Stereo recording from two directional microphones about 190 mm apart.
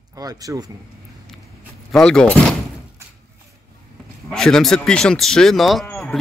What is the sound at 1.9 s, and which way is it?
Speech, 5° left (ahead or behind).